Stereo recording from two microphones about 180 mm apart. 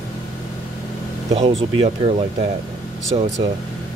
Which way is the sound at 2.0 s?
35° right (ahead or behind).